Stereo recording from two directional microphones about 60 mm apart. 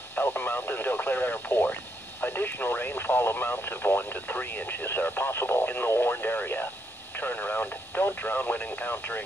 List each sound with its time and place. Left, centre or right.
0.2 s speech: left